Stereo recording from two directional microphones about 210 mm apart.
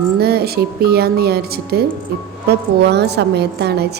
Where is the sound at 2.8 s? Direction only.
50° right (ahead or behind).